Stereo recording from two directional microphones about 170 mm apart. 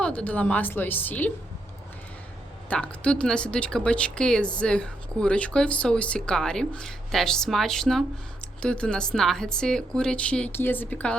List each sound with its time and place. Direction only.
0.0 s a woman's voice: 5° left (ahead or behind)
2.6 s speech: 5° left (ahead or behind)